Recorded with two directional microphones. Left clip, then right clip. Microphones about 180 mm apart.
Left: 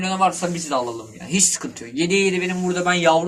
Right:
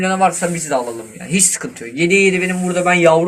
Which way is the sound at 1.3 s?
20° right (ahead or behind).